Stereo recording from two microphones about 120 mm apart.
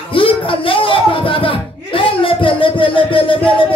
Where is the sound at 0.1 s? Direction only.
45° left (ahead or behind).